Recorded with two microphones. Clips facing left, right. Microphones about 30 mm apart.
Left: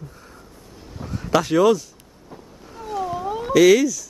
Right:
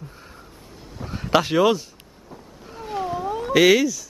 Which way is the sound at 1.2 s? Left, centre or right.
Right.